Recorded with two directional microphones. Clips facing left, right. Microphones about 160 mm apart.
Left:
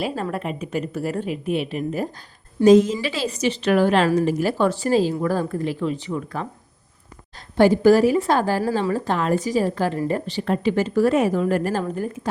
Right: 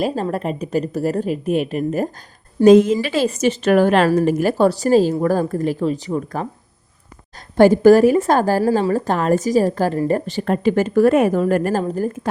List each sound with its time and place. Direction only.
0.0 s a woman's voice: 40° right (ahead or behind)
11.8 s a woman's voice: 35° right (ahead or behind)